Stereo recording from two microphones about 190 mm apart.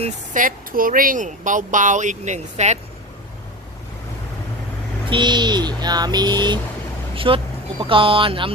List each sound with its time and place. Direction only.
0.0 s speech: 45° right (ahead or behind)
5.0 s speech: 25° right (ahead or behind)